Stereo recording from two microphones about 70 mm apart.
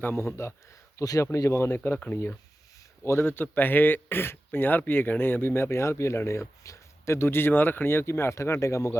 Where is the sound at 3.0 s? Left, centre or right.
Left.